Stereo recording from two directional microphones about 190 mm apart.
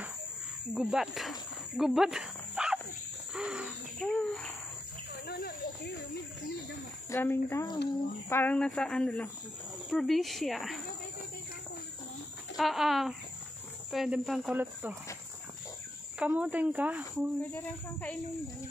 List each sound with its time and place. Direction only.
0.7 s speech: 5° right (ahead or behind)
5.1 s a sound: 60° left (ahead or behind)
7.1 s speech: 10° left (ahead or behind)
12.5 s speech: centre (ahead or behind)
16.2 s speech: 10° right (ahead or behind)